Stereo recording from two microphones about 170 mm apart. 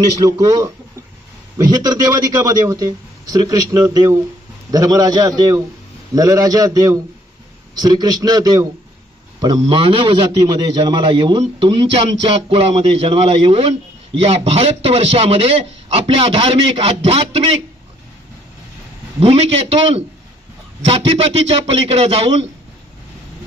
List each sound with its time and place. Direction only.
0.2 s a man's voice: 20° right (ahead or behind)
1.6 s a man's voice: 25° right (ahead or behind)
19.1 s a man's voice: 35° right (ahead or behind)